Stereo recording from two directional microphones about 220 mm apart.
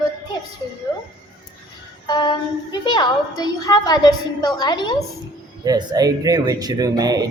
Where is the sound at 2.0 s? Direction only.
20° left (ahead or behind).